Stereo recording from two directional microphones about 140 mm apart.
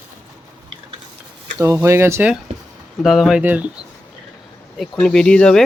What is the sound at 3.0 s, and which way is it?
Speech, centre (ahead or behind).